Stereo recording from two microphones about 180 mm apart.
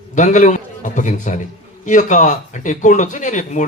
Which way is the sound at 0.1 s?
45° left (ahead or behind).